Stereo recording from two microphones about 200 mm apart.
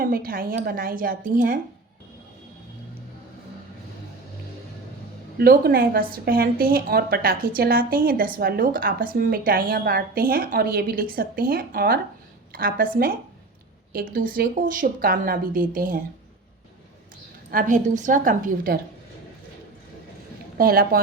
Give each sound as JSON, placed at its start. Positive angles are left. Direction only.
{"t": 0.0, "sound": "a woman's voice", "side_deg": -45}
{"t": 5.4, "sound": "a woman's voice", "side_deg": -50}
{"t": 13.9, "sound": "a woman's voice", "side_deg": -45}
{"t": 17.5, "sound": "a woman's voice", "side_deg": -40}
{"t": 20.6, "sound": "a woman's voice", "side_deg": -45}